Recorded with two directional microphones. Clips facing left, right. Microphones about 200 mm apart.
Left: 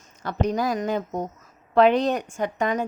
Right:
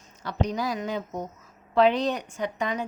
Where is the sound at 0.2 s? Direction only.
50° left (ahead or behind).